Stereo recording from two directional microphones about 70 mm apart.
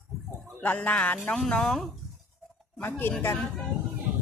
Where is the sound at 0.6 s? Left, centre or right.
Left.